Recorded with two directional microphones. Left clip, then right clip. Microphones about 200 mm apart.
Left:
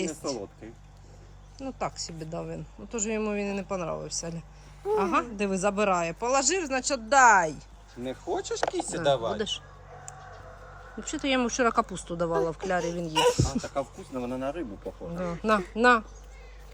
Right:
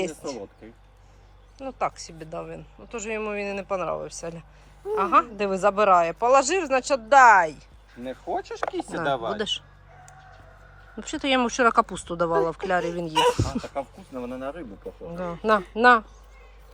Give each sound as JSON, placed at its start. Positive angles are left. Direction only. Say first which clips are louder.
{"t": 1.6, "sound": "speech", "louder": "right 5 dB", "side_deg": 5}
{"t": 8.0, "sound": "speech", "louder": "right 2 dB", "side_deg": -35}
{"t": 9.3, "sound": "speech", "louder": "right 3 dB", "side_deg": -5}
{"t": 11.0, "sound": "speech", "louder": "right 4 dB", "side_deg": -5}
{"t": 13.7, "sound": "speech", "louder": "even", "side_deg": -35}
{"t": 15.1, "sound": "speech", "louder": "right 4 dB", "side_deg": 0}